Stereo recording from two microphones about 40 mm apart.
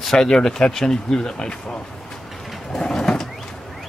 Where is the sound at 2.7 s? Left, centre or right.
Centre.